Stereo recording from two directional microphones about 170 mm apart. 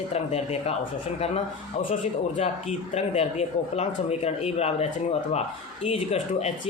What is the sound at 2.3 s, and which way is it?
Speech, 40° left (ahead or behind).